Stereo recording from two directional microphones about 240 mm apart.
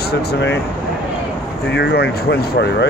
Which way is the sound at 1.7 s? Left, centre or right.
Left.